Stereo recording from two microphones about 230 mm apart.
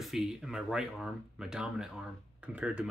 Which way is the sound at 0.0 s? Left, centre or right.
Centre.